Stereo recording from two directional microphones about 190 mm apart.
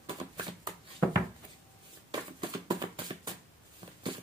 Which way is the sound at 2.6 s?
20° right (ahead or behind).